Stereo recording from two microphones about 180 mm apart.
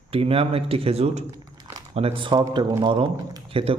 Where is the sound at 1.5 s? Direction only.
20° right (ahead or behind).